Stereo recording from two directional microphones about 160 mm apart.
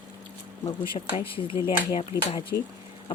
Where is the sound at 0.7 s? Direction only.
30° left (ahead or behind).